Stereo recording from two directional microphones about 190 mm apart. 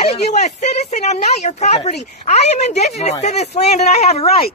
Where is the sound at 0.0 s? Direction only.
35° left (ahead or behind).